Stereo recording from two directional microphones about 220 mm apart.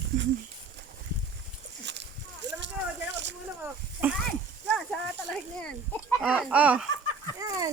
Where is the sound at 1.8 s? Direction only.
55° right (ahead or behind).